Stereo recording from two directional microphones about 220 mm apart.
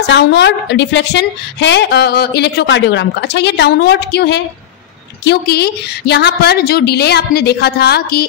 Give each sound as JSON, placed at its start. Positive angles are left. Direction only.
{"t": 0.0, "sound": "a woman's voice", "side_deg": 50}